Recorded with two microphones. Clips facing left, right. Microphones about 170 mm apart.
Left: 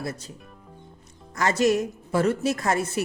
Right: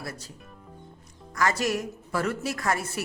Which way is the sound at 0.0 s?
20° left (ahead or behind).